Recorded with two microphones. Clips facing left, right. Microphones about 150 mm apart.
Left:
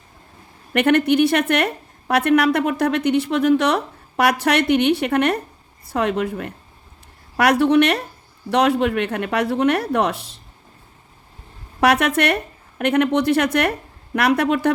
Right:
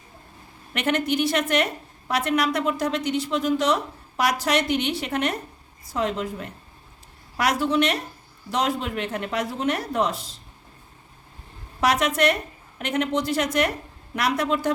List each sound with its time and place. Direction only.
0.7 s a woman's voice: 60° left (ahead or behind)
11.8 s a woman's voice: 60° left (ahead or behind)